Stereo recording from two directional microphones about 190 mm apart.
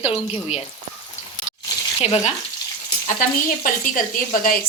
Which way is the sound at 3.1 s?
45° left (ahead or behind).